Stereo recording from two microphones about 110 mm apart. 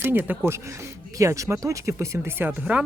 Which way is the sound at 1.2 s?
30° right (ahead or behind).